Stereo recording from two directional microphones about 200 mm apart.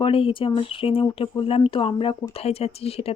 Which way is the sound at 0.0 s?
25° left (ahead or behind).